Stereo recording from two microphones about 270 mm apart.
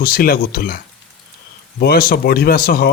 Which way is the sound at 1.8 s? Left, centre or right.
Left.